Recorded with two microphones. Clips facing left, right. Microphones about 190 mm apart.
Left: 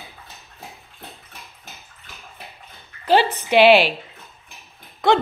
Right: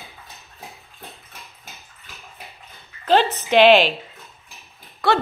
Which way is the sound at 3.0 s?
10° left (ahead or behind).